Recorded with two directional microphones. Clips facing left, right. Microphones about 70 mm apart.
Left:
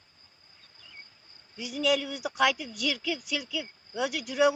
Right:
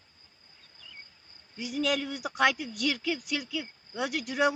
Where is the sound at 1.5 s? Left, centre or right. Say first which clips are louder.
Left 2 dB; right.